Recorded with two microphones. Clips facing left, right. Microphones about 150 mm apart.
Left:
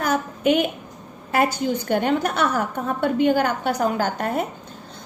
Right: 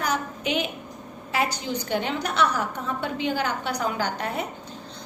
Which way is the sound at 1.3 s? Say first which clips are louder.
Left 6 dB; 50° left (ahead or behind).